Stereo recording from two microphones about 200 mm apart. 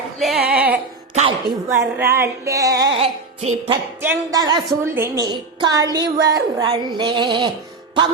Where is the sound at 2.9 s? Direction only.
30° right (ahead or behind).